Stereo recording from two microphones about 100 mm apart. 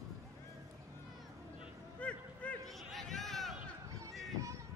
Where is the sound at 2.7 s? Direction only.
Centre (ahead or behind).